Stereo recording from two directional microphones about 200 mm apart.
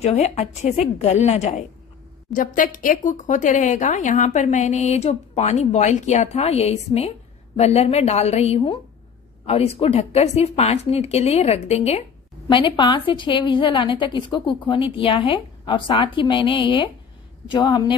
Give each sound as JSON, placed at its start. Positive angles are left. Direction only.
{"t": 0.0, "sound": "a woman's voice", "side_deg": 35}